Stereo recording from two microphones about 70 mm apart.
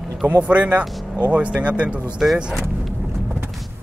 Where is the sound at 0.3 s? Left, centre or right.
Right.